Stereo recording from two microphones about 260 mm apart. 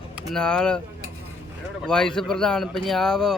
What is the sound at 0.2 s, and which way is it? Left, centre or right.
Speech, centre.